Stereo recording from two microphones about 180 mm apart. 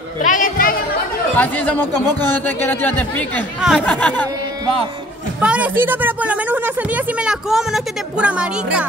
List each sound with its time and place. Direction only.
0.2 s a woman's voice: 45° left (ahead or behind)
1.3 s speech: 10° left (ahead or behind)
5.4 s a woman's voice: 5° right (ahead or behind)